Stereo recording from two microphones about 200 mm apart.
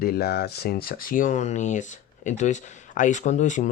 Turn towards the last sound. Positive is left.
turn(degrees=35)  # may be behind; listen again after turning